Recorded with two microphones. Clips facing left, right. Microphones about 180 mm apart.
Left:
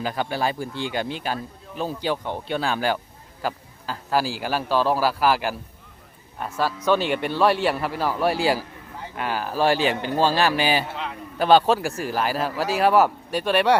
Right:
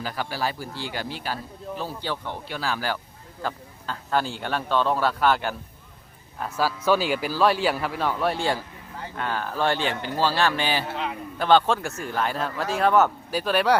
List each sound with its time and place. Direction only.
0.0 s speech: 20° left (ahead or behind)
3.4 s speech: 5° left (ahead or behind)
10.9 s speech: 5° right (ahead or behind)
11.3 s speech: 10° left (ahead or behind)